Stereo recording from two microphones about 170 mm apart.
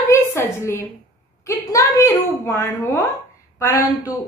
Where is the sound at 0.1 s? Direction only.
15° left (ahead or behind).